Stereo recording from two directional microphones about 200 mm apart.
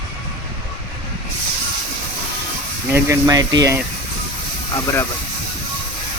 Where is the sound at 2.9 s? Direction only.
15° right (ahead or behind).